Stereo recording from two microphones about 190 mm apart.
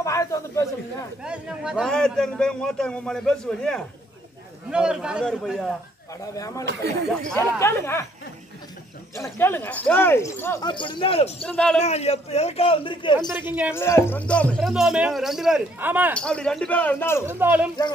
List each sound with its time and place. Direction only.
0.0 s snake: 15° left (ahead or behind)
1.2 s a man's voice: 5° right (ahead or behind)
6.3 s speech: 15° left (ahead or behind)
6.6 s speech: 60° right (ahead or behind)
7.3 s speech: 15° left (ahead or behind)
9.1 s speech: 15° left (ahead or behind)
10.7 s speech: 25° left (ahead or behind)
11.4 s a man's voice: 5° left (ahead or behind)
11.8 s a man's voice: 35° left (ahead or behind)
13.3 s speech: 10° right (ahead or behind)
13.7 s a man's voice: 15° left (ahead or behind); by 16.2 s 10° right (ahead or behind)
16.2 s speech: 5° left (ahead or behind)
17.3 s speech: 10° right (ahead or behind)